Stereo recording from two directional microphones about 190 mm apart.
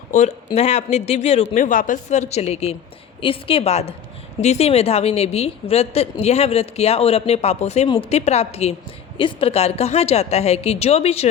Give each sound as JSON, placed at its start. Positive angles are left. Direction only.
{"t": 0.1, "sound": "a woman's voice", "side_deg": 35}